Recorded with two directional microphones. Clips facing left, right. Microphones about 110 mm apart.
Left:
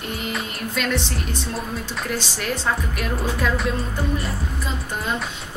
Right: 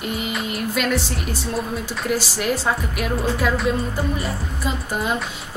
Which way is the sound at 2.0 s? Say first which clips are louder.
Right 6 dB; 10° right (ahead or behind).